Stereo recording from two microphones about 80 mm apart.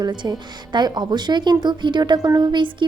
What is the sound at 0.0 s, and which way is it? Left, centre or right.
Speech, right.